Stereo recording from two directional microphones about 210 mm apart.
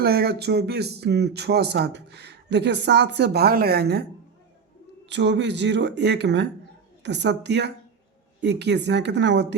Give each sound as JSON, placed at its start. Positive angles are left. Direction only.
{"t": 0.0, "sound": "speech", "side_deg": -50}
{"t": 5.0, "sound": "speech", "side_deg": -55}